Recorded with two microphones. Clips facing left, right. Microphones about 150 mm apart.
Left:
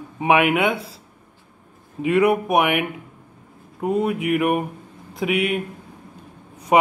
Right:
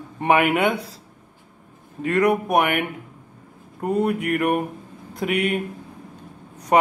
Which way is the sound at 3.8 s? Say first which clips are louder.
Even; centre (ahead or behind).